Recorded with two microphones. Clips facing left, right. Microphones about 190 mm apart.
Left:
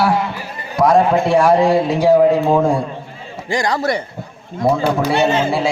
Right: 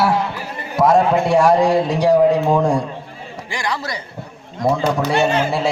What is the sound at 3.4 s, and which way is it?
Speech, 45° left (ahead or behind).